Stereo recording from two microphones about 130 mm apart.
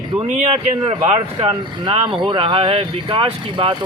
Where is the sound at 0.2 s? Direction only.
50° right (ahead or behind).